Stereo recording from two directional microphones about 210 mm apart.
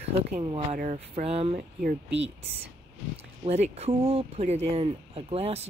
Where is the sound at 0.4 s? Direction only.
25° right (ahead or behind).